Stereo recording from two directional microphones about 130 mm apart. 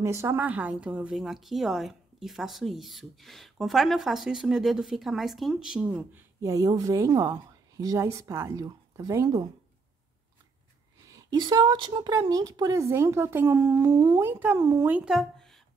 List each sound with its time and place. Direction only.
0.0 s speech: 20° right (ahead or behind)
6.4 s a woman's voice: 25° right (ahead or behind)
11.1 s a woman's voice: 30° right (ahead or behind)
15.0 s a sound: centre (ahead or behind)